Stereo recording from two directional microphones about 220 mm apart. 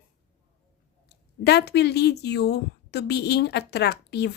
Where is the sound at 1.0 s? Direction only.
50° left (ahead or behind).